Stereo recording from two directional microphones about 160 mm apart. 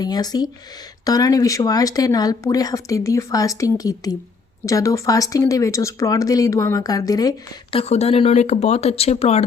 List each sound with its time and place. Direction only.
0.0 s speech: 25° left (ahead or behind)
7.7 s speech: 40° left (ahead or behind)